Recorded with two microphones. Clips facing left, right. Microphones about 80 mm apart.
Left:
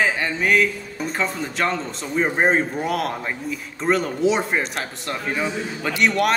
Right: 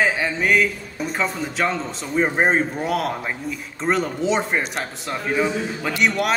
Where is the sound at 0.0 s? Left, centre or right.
Centre.